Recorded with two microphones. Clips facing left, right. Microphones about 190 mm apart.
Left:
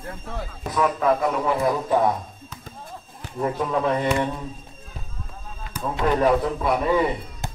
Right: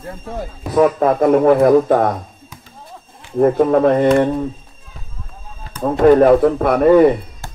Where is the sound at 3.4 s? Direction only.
55° right (ahead or behind).